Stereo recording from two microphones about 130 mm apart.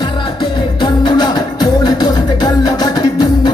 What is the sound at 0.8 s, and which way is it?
Music, 35° left (ahead or behind).